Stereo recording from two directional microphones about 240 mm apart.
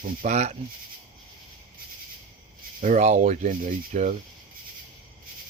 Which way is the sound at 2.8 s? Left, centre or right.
Right.